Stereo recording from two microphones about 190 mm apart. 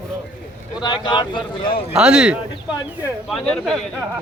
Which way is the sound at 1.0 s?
25° left (ahead or behind).